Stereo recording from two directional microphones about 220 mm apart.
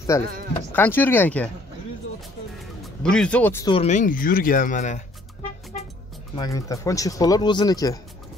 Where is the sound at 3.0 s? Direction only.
5° left (ahead or behind).